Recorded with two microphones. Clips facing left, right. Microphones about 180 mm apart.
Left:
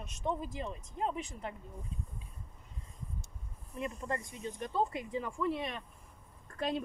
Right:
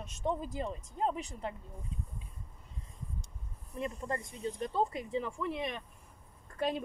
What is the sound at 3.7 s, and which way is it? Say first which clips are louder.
Speech: right 1 dB; 30° right (ahead or behind).